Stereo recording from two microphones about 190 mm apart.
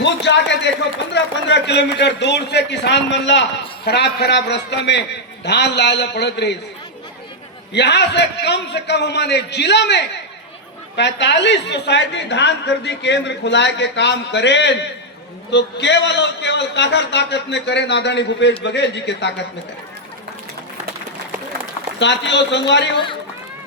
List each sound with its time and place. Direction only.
0.0 s a woman's voice: 65° left (ahead or behind)
7.7 s a man's voice: 65° left (ahead or behind)
21.9 s a man's voice: 65° left (ahead or behind)